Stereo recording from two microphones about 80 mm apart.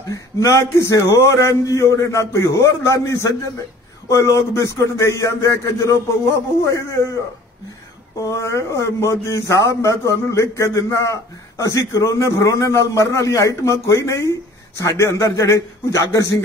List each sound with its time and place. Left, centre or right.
0.1 s speech: left
8.2 s speech: left